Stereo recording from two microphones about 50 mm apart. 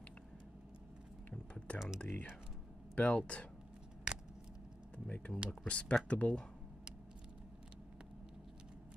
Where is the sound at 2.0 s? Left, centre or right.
Left.